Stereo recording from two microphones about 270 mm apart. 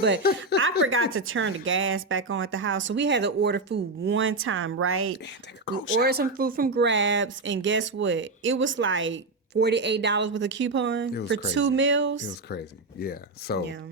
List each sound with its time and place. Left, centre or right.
0.2 s speech: left
0.9 s speech: right
6.0 s speech: right
12.5 s speech: left